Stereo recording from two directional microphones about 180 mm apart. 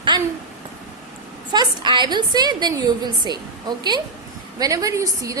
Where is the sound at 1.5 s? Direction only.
25° right (ahead or behind).